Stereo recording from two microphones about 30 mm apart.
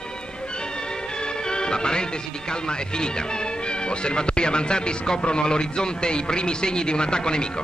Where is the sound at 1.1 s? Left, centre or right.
Left.